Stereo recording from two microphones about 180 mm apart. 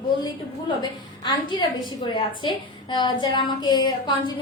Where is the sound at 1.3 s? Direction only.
25° left (ahead or behind).